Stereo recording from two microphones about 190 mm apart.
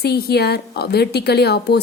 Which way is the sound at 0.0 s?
55° left (ahead or behind).